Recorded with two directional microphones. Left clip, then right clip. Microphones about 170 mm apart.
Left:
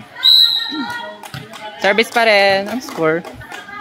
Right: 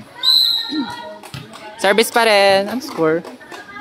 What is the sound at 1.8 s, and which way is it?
Speech, 20° right (ahead or behind).